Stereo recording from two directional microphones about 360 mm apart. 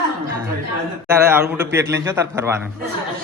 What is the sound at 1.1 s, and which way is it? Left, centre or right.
A man's voice, centre.